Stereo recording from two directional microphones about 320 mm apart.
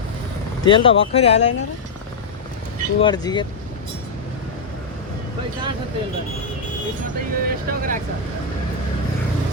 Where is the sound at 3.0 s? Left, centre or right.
Centre.